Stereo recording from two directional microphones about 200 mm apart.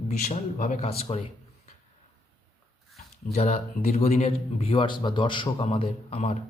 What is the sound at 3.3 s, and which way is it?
A man's voice, 35° left (ahead or behind).